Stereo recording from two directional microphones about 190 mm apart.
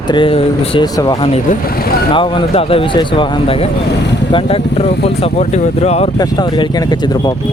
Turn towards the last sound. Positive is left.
turn(degrees=20)  # may be behind; listen again after turning